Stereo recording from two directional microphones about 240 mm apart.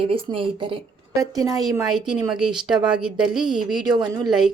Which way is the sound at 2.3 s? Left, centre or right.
Centre.